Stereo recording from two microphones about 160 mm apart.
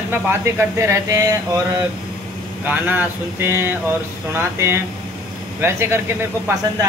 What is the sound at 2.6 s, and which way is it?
Speech, 10° right (ahead or behind).